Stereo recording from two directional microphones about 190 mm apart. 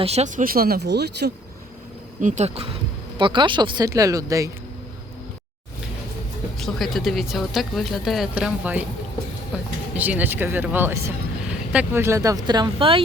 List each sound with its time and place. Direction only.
0.0 s speech: 35° right (ahead or behind)
0.4 s speech: 50° right (ahead or behind)
2.2 s speech: 35° right (ahead or behind)
3.2 s speech: 25° right (ahead or behind)
6.6 s speech: centre (ahead or behind)
9.9 s speech: 10° right (ahead or behind); by 13.0 s 25° right (ahead or behind)